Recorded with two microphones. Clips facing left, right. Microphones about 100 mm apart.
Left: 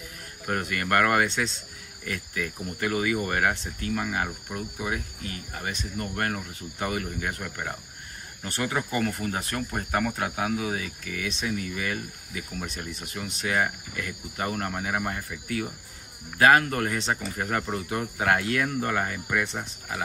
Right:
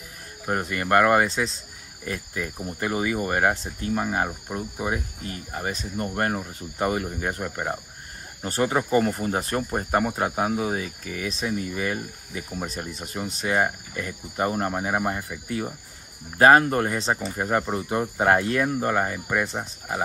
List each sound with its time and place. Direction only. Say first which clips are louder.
0.5 s speech: right 3 dB; 20° right (ahead or behind)
19.4 s speech: right 3 dB; 30° right (ahead or behind)